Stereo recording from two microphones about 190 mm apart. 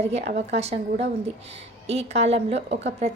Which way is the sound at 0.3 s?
35° right (ahead or behind).